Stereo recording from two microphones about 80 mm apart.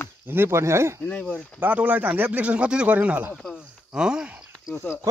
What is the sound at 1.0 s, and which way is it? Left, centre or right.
Speech, centre.